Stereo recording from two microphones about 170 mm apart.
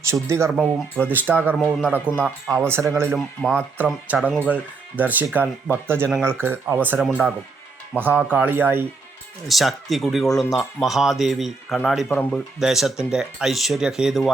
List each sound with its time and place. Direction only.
0.1 s speech: 15° right (ahead or behind)
0.5 s speech: centre (ahead or behind)
1.0 s speech: 10° right (ahead or behind)
2.0 s speech: 5° left (ahead or behind)
2.5 s speech: 15° right (ahead or behind)
9.5 s speech: centre (ahead or behind)